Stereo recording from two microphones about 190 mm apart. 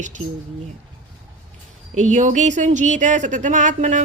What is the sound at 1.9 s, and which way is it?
Speech, 40° right (ahead or behind).